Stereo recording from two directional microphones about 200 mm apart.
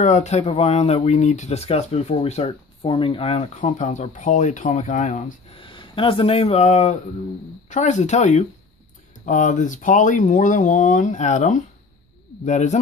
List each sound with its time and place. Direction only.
0.0 s speech: 35° left (ahead or behind)
5.6 s speech: 25° left (ahead or behind)